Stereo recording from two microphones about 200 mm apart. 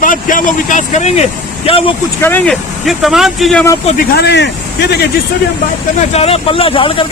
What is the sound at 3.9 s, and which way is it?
A man's voice, 50° left (ahead or behind).